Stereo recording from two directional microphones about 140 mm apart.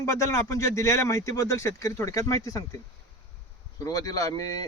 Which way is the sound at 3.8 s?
25° left (ahead or behind).